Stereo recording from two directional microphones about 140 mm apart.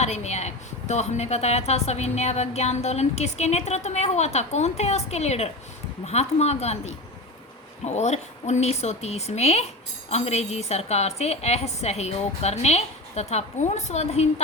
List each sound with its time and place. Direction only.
0.0 s a woman's voice: 50° left (ahead or behind)